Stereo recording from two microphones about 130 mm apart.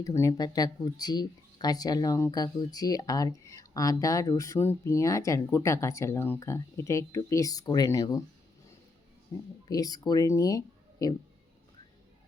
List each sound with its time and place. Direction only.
0.0 s speech: 25° left (ahead or behind)
9.3 s speech: 30° left (ahead or behind)